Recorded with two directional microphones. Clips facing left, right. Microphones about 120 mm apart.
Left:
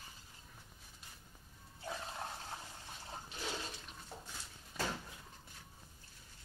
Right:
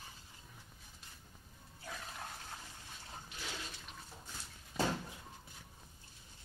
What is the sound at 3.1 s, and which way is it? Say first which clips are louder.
Toilet flush: left 4 dB; 30° left (ahead or behind).